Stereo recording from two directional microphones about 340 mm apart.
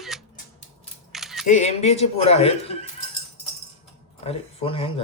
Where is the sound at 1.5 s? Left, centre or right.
Centre.